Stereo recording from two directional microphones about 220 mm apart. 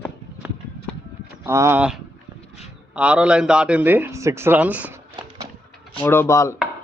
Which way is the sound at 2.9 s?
5° right (ahead or behind).